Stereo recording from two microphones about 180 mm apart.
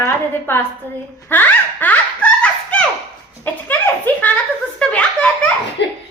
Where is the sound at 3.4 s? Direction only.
10° left (ahead or behind).